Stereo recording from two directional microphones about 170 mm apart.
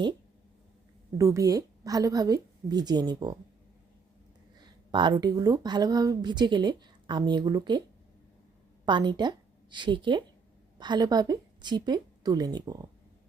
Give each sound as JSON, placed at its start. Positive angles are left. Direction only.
{"t": 1.2, "sound": "speech", "side_deg": -20}
{"t": 4.9, "sound": "speech", "side_deg": -30}
{"t": 8.9, "sound": "a woman's voice", "side_deg": -25}